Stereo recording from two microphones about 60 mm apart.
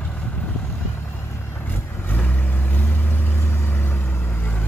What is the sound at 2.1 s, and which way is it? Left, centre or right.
Vehicle, left.